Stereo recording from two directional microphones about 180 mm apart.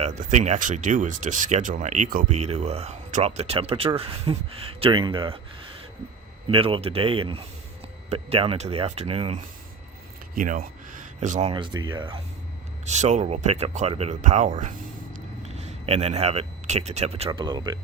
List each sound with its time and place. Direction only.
0.0 s speech: 40° right (ahead or behind)
6.5 s speech: 30° right (ahead or behind)
10.3 s a sound: 50° right (ahead or behind)
11.5 s speech: 25° right (ahead or behind)
12.8 s speech: 40° right (ahead or behind); by 17.7 s 25° right (ahead or behind)